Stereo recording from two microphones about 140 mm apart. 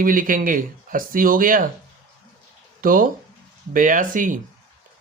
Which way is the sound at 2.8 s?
90° right.